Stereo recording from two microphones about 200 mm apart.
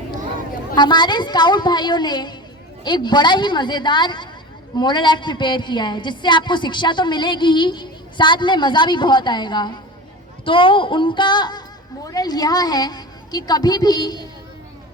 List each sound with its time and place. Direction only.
0.8 s a woman's voice: 20° left (ahead or behind)